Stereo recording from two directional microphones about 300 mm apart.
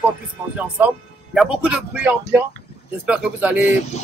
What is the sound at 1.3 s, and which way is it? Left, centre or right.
Speech, centre.